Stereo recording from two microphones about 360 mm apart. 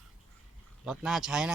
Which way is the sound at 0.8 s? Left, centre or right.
Centre.